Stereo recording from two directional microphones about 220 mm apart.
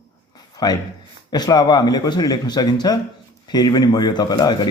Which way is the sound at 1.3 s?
15° left (ahead or behind).